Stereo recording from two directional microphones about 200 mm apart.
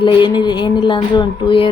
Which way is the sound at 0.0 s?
25° left (ahead or behind).